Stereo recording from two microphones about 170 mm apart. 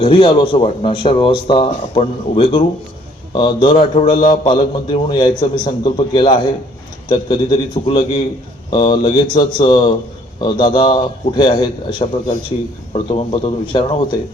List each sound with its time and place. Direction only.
0.0 s speech: 30° left (ahead or behind)
3.3 s a man's voice: 25° left (ahead or behind)